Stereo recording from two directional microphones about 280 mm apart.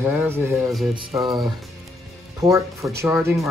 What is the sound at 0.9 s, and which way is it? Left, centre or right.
Speech, centre.